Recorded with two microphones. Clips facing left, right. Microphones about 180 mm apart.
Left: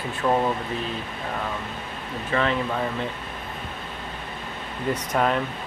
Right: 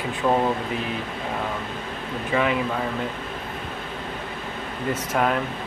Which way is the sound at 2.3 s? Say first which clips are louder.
Right 1 dB; 10° right (ahead or behind).